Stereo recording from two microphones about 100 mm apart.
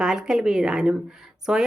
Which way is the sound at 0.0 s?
5° right (ahead or behind).